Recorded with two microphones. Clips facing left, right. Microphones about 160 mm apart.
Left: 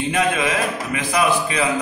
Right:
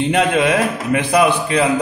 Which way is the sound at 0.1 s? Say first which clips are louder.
Right 4 dB; 65° right (ahead or behind).